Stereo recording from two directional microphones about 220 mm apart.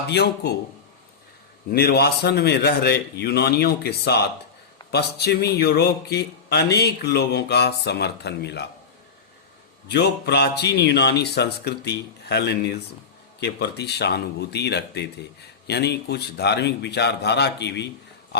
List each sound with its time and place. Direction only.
0.1 s speech: 50° left (ahead or behind)
1.7 s speech: 45° left (ahead or behind)
9.9 s speech: 50° left (ahead or behind)